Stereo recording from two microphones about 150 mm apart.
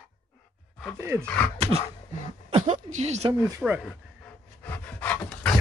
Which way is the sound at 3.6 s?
Centre (ahead or behind).